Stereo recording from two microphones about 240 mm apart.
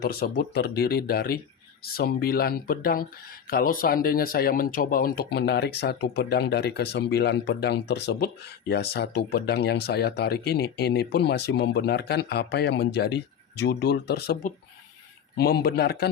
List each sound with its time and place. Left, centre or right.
0.0 s speech: left